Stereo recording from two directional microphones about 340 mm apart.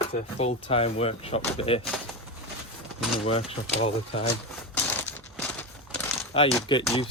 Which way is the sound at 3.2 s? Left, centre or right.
Centre.